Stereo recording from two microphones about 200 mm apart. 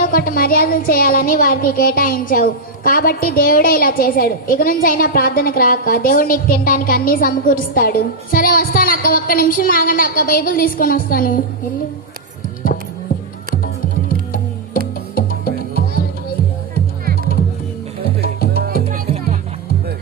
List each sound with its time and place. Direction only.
0.0 s speech: 45° left (ahead or behind)
15.1 s music: 50° left (ahead or behind)
18.2 s music: 50° left (ahead or behind)